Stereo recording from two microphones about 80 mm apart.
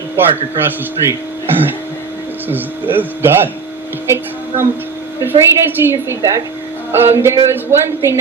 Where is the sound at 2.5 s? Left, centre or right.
Right.